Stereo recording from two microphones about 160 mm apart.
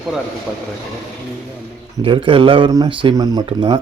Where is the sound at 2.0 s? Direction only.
30° right (ahead or behind).